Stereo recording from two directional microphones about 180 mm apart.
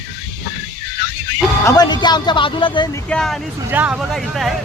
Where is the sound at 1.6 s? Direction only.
25° left (ahead or behind).